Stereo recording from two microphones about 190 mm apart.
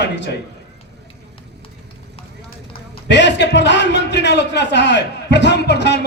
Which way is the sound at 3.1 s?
65° left (ahead or behind).